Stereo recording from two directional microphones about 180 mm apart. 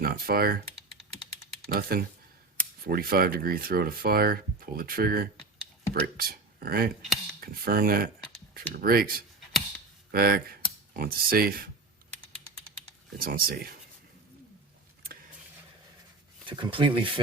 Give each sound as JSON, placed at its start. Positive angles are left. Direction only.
{"t": 0.0, "sound": "speech", "side_deg": -55}
{"t": 1.6, "sound": "speech", "side_deg": -55}
{"t": 7.4, "sound": "cutlery", "side_deg": -55}
{"t": 8.5, "sound": "speech", "side_deg": -55}
{"t": 13.1, "sound": "speech", "side_deg": -55}
{"t": 16.5, "sound": "speech", "side_deg": -25}